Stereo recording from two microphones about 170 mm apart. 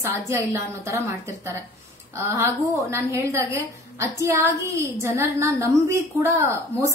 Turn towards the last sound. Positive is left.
turn(degrees=-15)  # may be behind; listen again after turning